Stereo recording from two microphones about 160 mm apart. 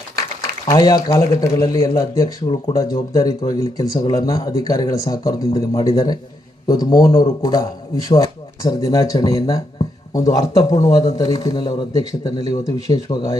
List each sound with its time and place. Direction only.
0.7 s speech: 25° left (ahead or behind)